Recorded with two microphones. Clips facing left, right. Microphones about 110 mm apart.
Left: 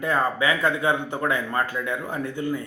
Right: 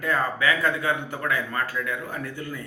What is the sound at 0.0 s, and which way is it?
A man's voice, 20° left (ahead or behind).